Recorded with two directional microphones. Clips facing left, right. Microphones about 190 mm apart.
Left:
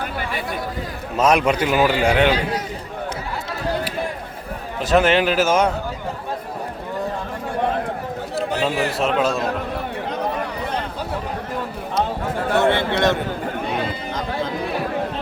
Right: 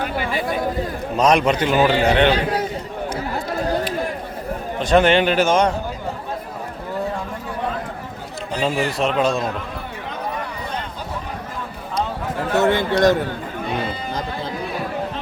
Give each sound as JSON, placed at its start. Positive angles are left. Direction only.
{"t": 1.1, "sound": "a man's voice", "side_deg": 5}
{"t": 4.8, "sound": "a man's voice", "side_deg": 5}
{"t": 8.4, "sound": "speech", "side_deg": 0}
{"t": 12.5, "sound": "a sound", "side_deg": -40}